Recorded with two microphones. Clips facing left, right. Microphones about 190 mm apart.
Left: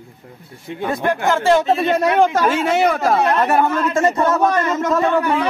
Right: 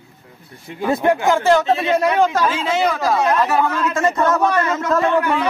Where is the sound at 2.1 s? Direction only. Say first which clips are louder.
Left 2 dB; 55° left (ahead or behind).